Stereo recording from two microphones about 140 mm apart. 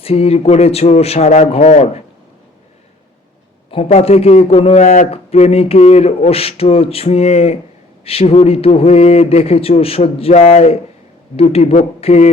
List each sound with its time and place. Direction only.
0.0 s speech: 45° left (ahead or behind)
3.8 s speech: 50° left (ahead or behind)